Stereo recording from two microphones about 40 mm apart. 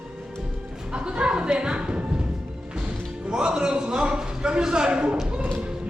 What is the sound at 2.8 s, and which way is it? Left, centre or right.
Speech, right.